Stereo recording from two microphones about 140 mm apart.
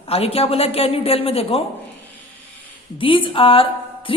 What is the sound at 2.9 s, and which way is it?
A woman's voice, 40° left (ahead or behind).